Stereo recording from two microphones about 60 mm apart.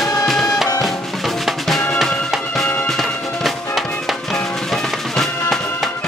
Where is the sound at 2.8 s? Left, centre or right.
Centre.